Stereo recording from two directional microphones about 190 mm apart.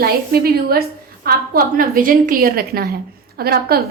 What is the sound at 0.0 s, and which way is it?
A woman's voice, 55° right (ahead or behind).